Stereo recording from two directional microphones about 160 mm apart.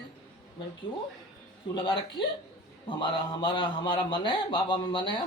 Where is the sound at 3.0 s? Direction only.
30° left (ahead or behind).